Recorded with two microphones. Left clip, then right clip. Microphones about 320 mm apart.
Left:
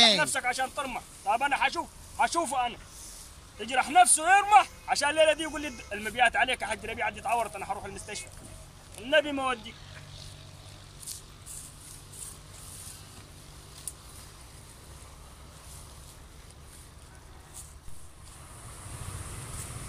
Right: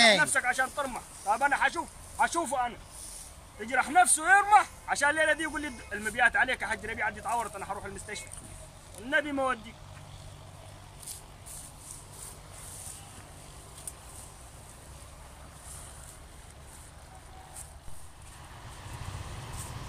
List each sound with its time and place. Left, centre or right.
0.2 s a man's voice: centre